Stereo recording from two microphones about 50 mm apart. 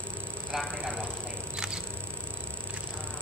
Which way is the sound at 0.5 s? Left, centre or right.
Centre.